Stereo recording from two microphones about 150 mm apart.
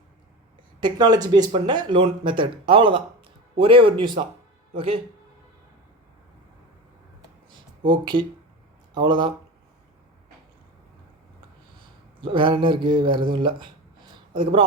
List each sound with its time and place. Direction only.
0.8 s speech: 30° right (ahead or behind)
7.9 s speech: 30° right (ahead or behind)
12.2 s speech: 35° right (ahead or behind)
13.3 s a sound: 30° right (ahead or behind)